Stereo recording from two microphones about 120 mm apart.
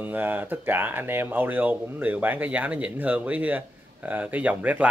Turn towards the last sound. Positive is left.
turn(degrees=-10)  # may be behind; listen again after turning